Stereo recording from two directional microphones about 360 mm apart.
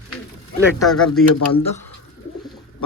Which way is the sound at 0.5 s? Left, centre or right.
Centre.